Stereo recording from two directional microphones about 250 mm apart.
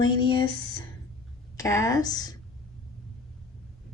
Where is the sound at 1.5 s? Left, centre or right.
Centre.